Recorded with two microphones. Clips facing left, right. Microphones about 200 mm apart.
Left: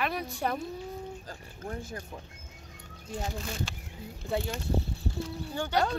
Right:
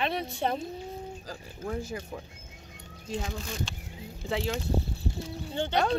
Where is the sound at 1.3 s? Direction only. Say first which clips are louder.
Right 4 dB; 90° right.